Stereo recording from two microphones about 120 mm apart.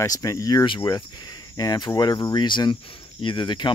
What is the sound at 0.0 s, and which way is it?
Speech, 30° left (ahead or behind).